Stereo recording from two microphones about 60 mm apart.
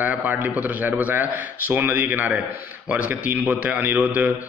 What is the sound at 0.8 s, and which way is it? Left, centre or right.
A man's voice, right.